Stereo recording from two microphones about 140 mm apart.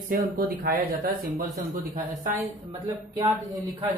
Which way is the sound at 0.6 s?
90° right.